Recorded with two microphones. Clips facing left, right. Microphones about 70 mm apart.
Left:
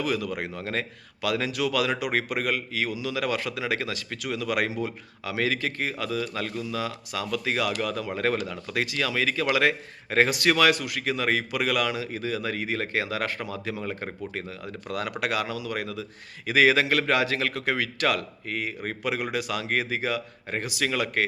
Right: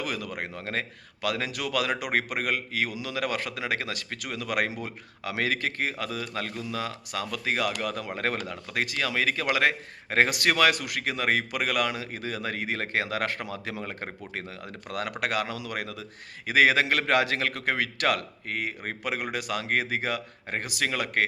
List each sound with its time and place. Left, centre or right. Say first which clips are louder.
0.0 s a man's voice: left 5 dB; right
13.5 s speech: left 2 dB; right
13.8 s a man's voice: left 4 dB; right
18.8 s speech: left 2 dB; right
19.3 s a man's voice: left 1 dB; right